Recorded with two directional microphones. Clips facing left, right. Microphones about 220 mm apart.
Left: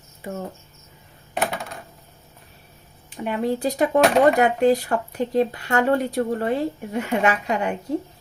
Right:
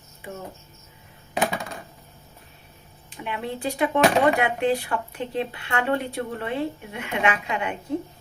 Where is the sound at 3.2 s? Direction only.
40° left (ahead or behind).